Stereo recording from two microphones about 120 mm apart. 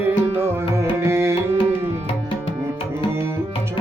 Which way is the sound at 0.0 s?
20° right (ahead or behind).